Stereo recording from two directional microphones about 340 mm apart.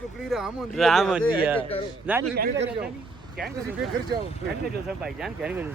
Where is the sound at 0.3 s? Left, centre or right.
Centre.